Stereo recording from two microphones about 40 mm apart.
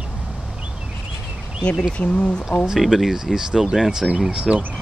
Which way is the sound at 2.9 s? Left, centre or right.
Centre.